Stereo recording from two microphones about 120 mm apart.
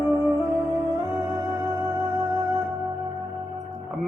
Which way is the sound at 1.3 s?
25° right (ahead or behind).